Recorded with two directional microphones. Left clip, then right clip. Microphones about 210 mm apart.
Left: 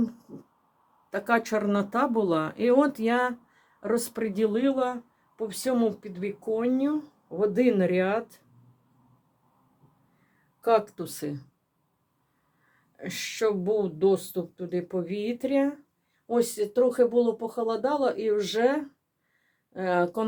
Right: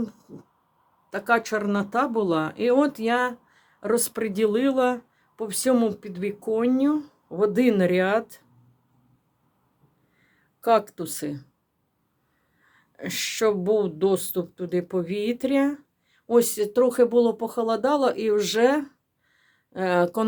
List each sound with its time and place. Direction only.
1.1 s speech: 10° right (ahead or behind)
10.6 s speech: 20° right (ahead or behind)
13.0 s speech: 25° right (ahead or behind)